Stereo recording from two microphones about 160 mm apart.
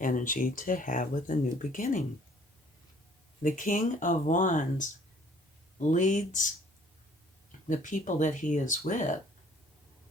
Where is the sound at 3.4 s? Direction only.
55° left (ahead or behind).